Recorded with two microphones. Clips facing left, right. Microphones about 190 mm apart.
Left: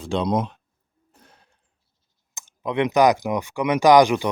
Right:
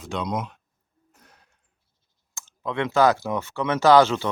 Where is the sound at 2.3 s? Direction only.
20° left (ahead or behind).